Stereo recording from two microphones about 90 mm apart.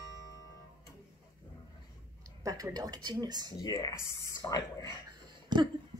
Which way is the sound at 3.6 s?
45° left (ahead or behind).